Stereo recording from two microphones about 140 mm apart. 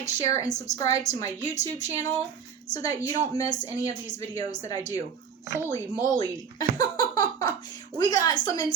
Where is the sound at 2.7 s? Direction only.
25° left (ahead or behind).